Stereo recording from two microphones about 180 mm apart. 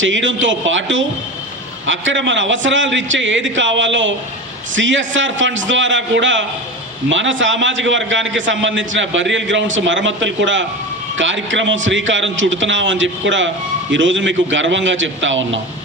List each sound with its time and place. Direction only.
0.0 s a man's voice: 90° right